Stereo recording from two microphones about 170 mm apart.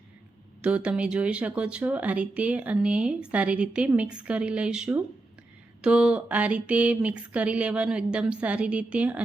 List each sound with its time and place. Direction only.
0.6 s speech: 5° right (ahead or behind)